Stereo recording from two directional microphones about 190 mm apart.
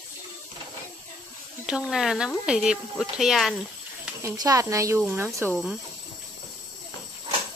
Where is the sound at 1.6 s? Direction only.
5° right (ahead or behind).